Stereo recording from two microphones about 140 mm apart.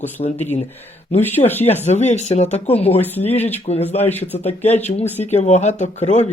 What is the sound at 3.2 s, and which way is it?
Speech, 50° left (ahead or behind).